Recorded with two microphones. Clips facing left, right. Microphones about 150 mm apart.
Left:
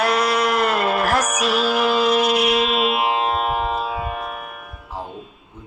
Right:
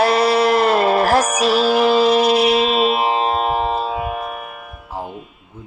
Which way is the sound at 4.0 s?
5° right (ahead or behind).